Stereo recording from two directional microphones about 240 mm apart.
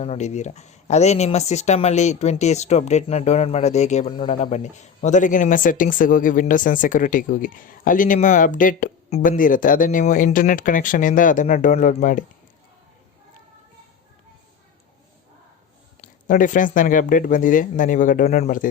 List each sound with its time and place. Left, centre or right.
0.0 s speech: left
16.0 s speech: left